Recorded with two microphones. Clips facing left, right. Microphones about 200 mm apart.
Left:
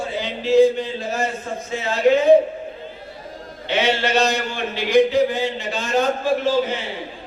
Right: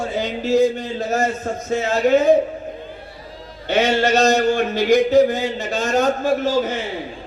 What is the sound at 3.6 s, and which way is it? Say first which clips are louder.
A man's voice: right 3 dB; 45° right (ahead or behind).